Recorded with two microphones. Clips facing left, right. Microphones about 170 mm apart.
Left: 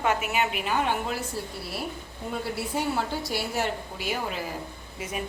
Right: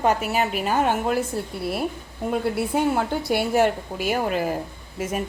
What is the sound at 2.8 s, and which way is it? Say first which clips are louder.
A woman's voice: right 4 dB; 55° right (ahead or behind).